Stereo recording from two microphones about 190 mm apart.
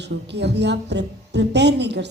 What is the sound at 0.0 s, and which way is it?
A woman's voice, 65° right (ahead or behind).